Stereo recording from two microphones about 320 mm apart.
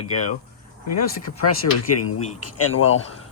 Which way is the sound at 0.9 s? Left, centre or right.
Left.